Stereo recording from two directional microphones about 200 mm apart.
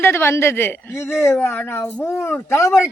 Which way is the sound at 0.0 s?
10° left (ahead or behind).